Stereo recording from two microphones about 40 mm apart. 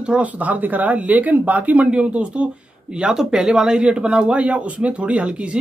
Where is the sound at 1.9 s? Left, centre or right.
Right.